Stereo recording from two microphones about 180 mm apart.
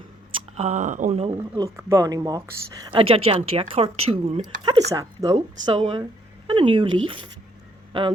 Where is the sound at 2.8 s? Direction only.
30° right (ahead or behind).